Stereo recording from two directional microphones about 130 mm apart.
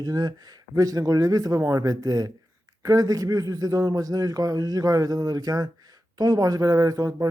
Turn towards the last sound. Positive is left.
turn(degrees=-30)  # may be behind; listen again after turning